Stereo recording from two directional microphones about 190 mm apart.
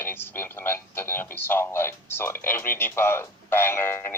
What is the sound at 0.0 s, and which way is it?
A man's voice, 10° left (ahead or behind).